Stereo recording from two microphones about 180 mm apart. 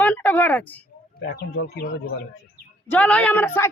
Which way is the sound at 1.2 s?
70° left (ahead or behind).